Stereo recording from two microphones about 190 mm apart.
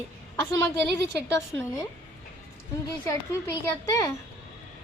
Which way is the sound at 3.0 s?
15° left (ahead or behind).